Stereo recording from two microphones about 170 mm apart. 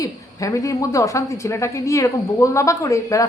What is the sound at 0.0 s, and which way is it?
A woman's voice, 20° left (ahead or behind).